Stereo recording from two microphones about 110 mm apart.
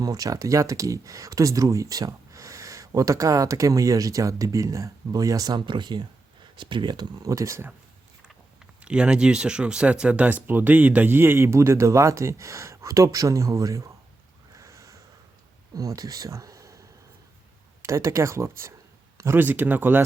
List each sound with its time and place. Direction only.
0.0 s speech: 30° right (ahead or behind)
8.8 s speech: 10° right (ahead or behind); by 13.9 s 30° right (ahead or behind)
14.5 s a sound: 30° right (ahead or behind)
15.7 s speech: 35° right (ahead or behind)
17.8 s speech: 30° right (ahead or behind)